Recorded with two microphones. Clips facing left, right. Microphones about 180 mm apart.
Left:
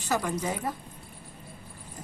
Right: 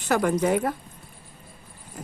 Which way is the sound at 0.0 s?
60° right (ahead or behind).